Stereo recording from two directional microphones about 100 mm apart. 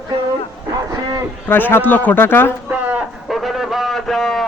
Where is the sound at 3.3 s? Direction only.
Centre (ahead or behind).